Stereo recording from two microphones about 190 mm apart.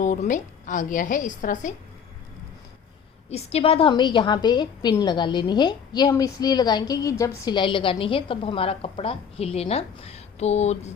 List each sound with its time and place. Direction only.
0.0 s a woman's voice: 40° left (ahead or behind)
3.2 s a woman's voice: 35° left (ahead or behind)